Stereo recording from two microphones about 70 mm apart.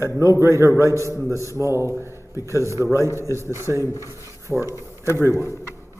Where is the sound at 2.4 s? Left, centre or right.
Left.